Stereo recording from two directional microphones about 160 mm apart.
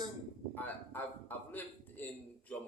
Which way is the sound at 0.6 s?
10° left (ahead or behind).